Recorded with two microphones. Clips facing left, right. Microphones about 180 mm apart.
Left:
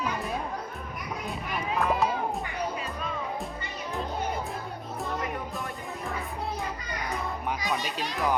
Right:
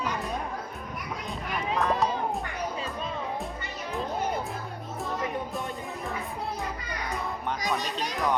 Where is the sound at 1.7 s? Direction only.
5° left (ahead or behind).